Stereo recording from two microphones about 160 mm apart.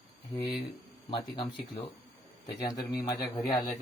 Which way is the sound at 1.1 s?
30° left (ahead or behind).